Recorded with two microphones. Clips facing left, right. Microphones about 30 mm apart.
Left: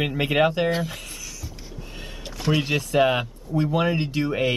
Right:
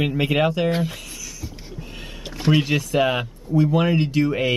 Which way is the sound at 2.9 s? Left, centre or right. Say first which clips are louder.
Left 1 dB; centre.